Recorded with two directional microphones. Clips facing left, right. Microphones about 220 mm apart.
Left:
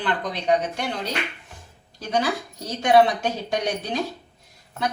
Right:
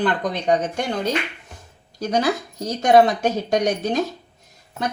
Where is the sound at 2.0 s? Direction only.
45° right (ahead or behind).